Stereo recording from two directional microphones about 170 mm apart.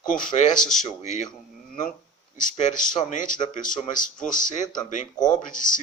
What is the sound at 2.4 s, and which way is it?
Speech, 45° left (ahead or behind).